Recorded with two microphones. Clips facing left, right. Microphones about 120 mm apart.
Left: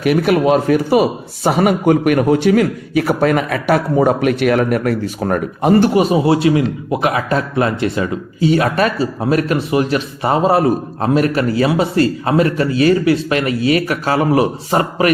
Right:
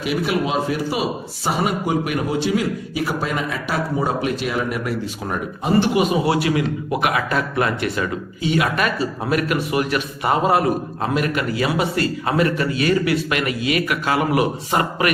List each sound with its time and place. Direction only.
0.0 s a man's voice: 60° left (ahead or behind)
5.9 s a man's voice: 35° left (ahead or behind)
8.4 s speech: 35° left (ahead or behind)